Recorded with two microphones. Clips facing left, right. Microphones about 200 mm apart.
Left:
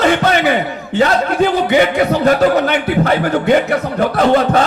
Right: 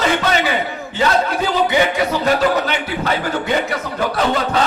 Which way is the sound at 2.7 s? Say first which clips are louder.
Left 6 dB; 55° left (ahead or behind).